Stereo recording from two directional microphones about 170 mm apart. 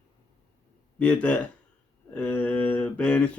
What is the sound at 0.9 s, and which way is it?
Speech, 5° left (ahead or behind).